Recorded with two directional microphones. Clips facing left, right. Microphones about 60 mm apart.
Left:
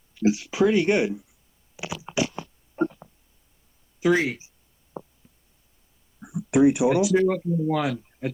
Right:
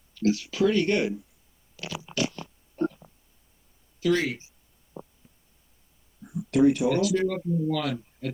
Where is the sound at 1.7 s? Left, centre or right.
Centre.